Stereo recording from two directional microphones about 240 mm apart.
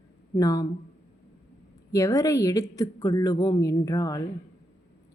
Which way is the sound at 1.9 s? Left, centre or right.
Centre.